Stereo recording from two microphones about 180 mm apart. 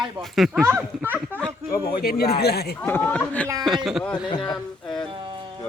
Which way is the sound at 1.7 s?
55° left (ahead or behind).